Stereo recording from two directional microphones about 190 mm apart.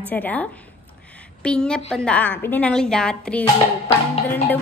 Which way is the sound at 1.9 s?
5° left (ahead or behind).